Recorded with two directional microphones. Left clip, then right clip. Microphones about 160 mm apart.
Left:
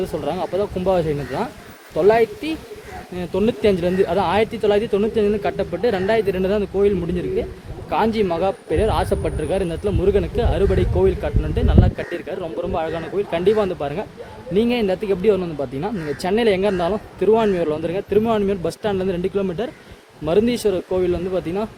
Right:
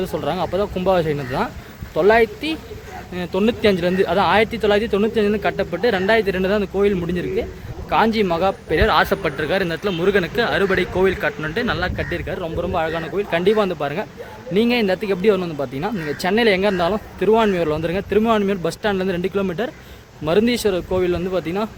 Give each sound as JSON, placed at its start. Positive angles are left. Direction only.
{"t": 0.0, "sound": "speech", "side_deg": 10}
{"t": 0.4, "sound": "speech", "side_deg": -15}
{"t": 0.9, "sound": "speech", "side_deg": 10}